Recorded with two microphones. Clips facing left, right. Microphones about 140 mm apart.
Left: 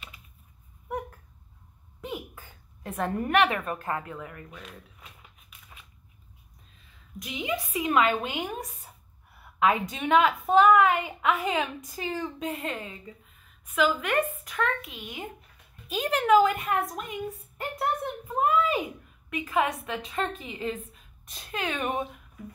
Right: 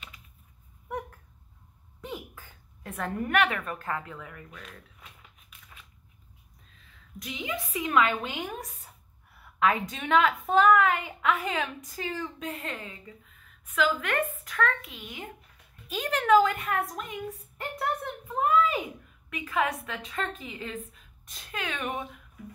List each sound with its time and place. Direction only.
2.0 s a sound: 10° left (ahead or behind)
2.8 s a woman's voice: 30° left (ahead or behind)
4.1 s a woman's voice: 5° left (ahead or behind)
7.2 s a woman's voice: 10° left (ahead or behind)
7.7 s a woman's voice: 25° left (ahead or behind)
8.2 s a woman's voice: 15° left (ahead or behind)
18.3 s a sound: 20° left (ahead or behind)
19.3 s a woman's voice: 20° left (ahead or behind)